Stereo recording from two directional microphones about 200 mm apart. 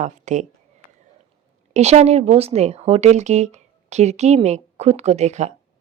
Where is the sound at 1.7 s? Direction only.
35° right (ahead or behind).